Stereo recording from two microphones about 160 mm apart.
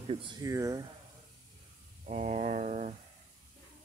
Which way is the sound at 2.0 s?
50° right (ahead or behind).